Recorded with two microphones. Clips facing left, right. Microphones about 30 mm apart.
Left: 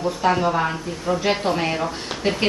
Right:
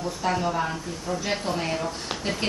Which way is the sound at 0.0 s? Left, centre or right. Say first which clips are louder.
Left 6 dB; left.